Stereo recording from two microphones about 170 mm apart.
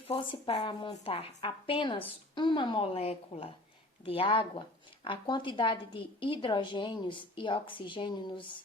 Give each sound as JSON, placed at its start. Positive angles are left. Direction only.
{"t": 0.1, "sound": "a woman's voice", "side_deg": 30}